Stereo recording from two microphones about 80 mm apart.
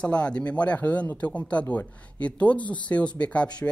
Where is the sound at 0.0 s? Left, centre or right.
Centre.